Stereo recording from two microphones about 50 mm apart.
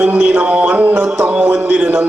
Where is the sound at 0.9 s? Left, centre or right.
Centre.